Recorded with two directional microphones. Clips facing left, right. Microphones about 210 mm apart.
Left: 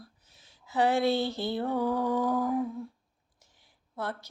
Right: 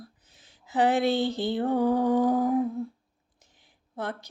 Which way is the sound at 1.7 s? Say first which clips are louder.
Right 6 dB; 20° right (ahead or behind).